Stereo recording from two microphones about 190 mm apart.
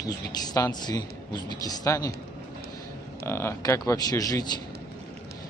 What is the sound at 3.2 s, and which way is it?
Speech, 15° left (ahead or behind).